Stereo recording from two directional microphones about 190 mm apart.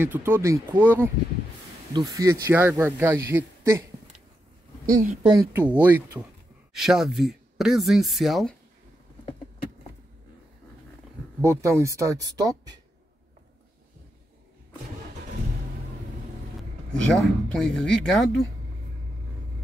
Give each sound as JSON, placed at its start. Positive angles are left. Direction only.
{"t": 0.0, "sound": "a man's voice", "side_deg": -10}
{"t": 4.8, "sound": "speech", "side_deg": -40}
{"t": 5.3, "sound": "a man's voice", "side_deg": -15}
{"t": 11.4, "sound": "a man's voice", "side_deg": -15}
{"t": 16.9, "sound": "speech", "side_deg": 5}